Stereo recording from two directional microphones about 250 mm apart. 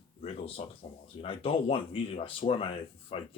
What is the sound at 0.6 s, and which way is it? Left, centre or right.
Speech, left.